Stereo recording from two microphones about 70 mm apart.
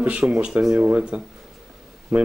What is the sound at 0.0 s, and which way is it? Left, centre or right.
Speech, centre.